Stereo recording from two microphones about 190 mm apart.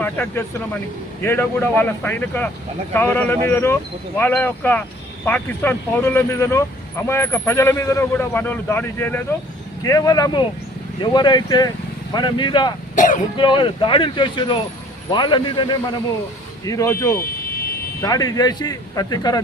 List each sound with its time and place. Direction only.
0.0 s speech: 10° left (ahead or behind)
13.0 s speech: 45° left (ahead or behind)
13.3 s speech: 25° left (ahead or behind)